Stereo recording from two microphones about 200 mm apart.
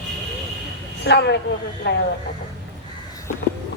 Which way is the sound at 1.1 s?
55° left (ahead or behind).